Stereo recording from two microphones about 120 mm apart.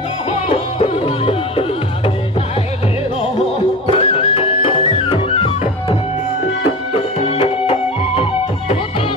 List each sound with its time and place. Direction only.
0.3 s music: 55° left (ahead or behind)
3.8 s music: 55° left (ahead or behind)
7.2 s music: 55° left (ahead or behind)